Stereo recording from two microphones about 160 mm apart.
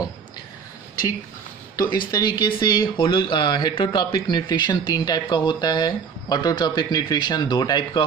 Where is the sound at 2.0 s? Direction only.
25° left (ahead or behind).